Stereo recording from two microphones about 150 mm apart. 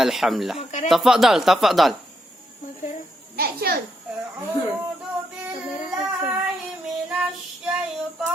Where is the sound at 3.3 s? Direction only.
90° right.